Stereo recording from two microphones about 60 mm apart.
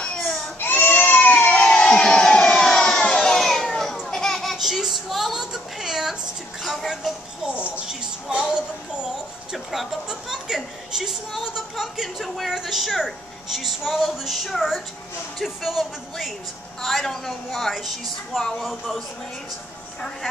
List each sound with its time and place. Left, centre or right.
0.6 s crowd: left; by 3.9 s centre
4.0 s a sound: centre
6.6 s music: centre
7.4 s music: right
7.9 s a sound: centre
9.5 s a woman's voice: centre